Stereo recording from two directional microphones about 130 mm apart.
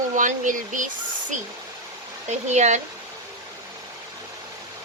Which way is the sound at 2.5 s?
65° right (ahead or behind).